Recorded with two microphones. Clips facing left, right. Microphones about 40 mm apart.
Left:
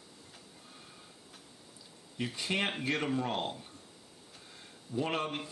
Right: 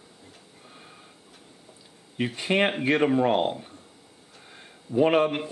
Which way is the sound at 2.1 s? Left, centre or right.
Right.